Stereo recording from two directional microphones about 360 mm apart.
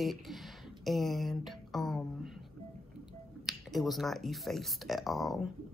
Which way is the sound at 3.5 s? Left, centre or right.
Centre.